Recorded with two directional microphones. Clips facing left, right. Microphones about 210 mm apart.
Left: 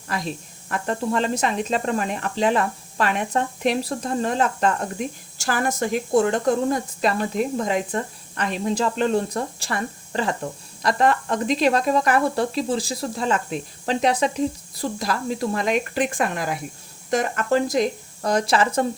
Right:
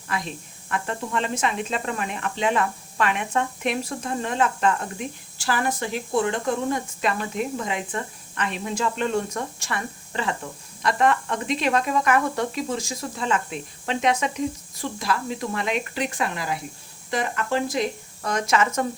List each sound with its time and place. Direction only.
0.1 s speech: 40° left (ahead or behind)